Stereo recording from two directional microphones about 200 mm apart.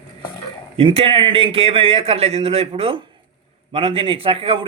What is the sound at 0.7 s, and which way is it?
Speech, 30° right (ahead or behind).